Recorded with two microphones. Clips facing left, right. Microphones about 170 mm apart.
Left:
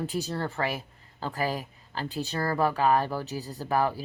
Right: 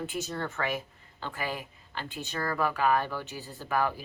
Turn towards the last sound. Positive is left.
turn(degrees=35)  # may be behind; listen again after turning